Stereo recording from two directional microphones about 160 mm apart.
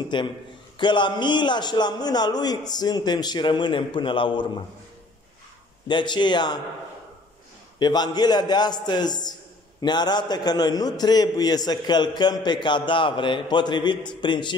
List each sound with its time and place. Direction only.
0.1 s a man's voice: 30° left (ahead or behind)
5.9 s a man's voice: 30° left (ahead or behind)
7.8 s a man's voice: 25° left (ahead or behind)